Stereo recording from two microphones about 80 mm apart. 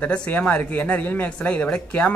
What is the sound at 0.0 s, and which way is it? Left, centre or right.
Speech, centre.